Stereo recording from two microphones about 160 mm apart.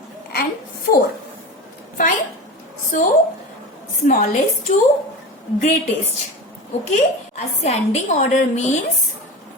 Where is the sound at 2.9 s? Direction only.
55° left (ahead or behind).